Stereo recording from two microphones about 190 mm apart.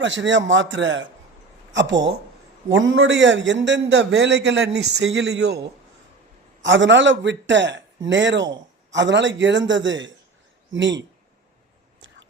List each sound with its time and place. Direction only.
0.0 s a man's voice: 75° right (ahead or behind); by 5.6 s 60° right (ahead or behind)
6.6 s a man's voice: 75° right (ahead or behind)